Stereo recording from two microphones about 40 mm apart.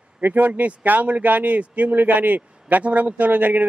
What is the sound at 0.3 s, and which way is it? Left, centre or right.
A man's voice, right.